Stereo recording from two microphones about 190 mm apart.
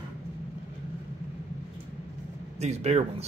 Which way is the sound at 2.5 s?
35° right (ahead or behind).